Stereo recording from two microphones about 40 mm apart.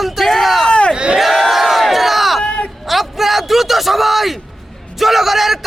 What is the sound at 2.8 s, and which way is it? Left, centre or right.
A man's voice, centre.